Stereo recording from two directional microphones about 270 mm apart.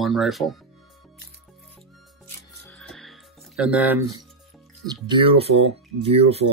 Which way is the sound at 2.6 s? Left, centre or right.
Centre.